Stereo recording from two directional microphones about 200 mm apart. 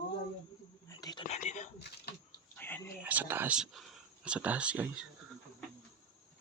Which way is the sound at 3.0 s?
10° right (ahead or behind).